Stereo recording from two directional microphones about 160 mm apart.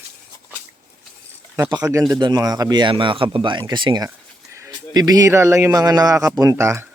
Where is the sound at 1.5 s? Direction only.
20° right (ahead or behind).